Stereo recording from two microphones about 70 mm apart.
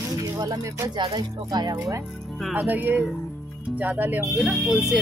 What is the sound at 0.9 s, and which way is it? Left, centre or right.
Speech, right.